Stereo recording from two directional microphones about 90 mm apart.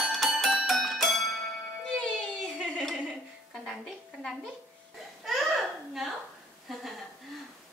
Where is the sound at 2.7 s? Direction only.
5° left (ahead or behind).